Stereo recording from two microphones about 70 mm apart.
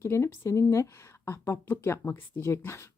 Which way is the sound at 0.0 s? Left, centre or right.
Left.